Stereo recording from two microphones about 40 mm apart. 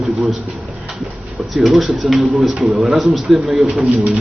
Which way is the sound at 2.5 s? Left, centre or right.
Right.